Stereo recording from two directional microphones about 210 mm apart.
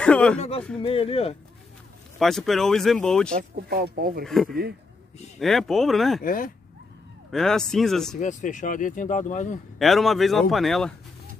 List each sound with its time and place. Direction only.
0.0 s speech: 5° left (ahead or behind)
0.4 s speech: 30° left (ahead or behind)
2.1 s speech: centre (ahead or behind)
3.5 s speech: 50° right (ahead or behind)
4.2 s speech: centre (ahead or behind)
6.2 s speech: 40° left (ahead or behind)
7.2 s speech: centre (ahead or behind)
8.2 s speech: 35° left (ahead or behind)
9.8 s speech: centre (ahead or behind)